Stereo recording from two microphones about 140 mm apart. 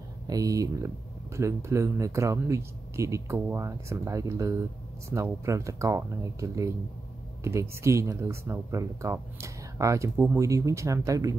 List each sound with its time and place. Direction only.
0.3 s speech: 25° right (ahead or behind)